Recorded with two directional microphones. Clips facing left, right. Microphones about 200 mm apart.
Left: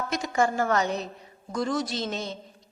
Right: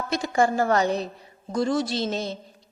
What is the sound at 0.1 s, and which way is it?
A woman's voice, 30° right (ahead or behind).